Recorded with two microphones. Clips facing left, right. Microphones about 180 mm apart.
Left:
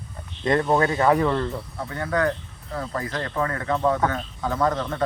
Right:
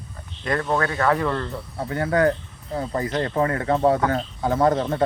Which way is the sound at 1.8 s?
30° right (ahead or behind).